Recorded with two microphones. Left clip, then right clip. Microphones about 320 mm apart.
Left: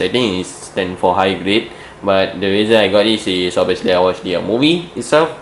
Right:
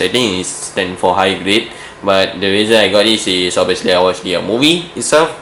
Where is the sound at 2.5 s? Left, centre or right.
Centre.